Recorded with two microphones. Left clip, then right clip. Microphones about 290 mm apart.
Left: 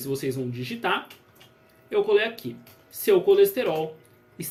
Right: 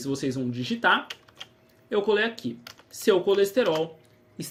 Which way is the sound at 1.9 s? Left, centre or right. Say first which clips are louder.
Left 2 dB; right.